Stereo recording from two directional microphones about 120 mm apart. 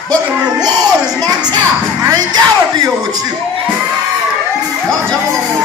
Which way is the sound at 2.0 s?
35° right (ahead or behind).